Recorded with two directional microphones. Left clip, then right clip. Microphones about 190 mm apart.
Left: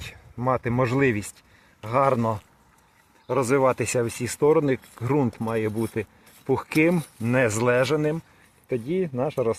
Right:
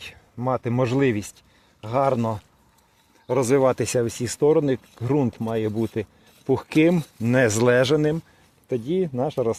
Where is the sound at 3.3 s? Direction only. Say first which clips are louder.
Right 2 dB; 35° right (ahead or behind).